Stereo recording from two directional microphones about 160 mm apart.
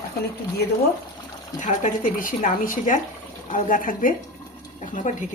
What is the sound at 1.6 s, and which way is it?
Speech, 55° left (ahead or behind).